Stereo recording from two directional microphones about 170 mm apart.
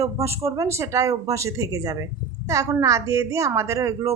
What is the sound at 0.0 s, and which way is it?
Speech, 20° right (ahead or behind).